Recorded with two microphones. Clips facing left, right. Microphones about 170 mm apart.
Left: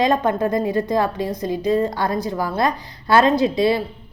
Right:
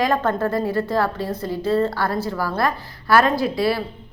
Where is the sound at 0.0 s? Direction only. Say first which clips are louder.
Left 2 dB; 15° left (ahead or behind).